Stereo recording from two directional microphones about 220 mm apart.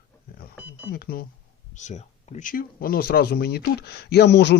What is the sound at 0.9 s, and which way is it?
Speech, 45° left (ahead or behind).